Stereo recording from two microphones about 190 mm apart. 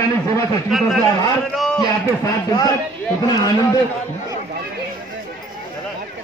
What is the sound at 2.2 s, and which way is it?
Speech, 20° left (ahead or behind).